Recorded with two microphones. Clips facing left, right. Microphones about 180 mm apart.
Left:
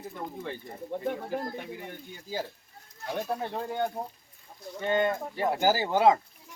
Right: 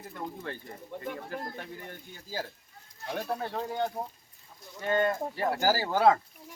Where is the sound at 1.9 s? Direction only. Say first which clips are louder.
Left 3 dB; 15° left (ahead or behind).